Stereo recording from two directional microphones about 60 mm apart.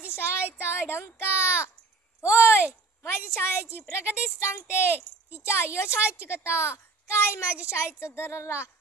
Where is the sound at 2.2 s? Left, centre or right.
Left.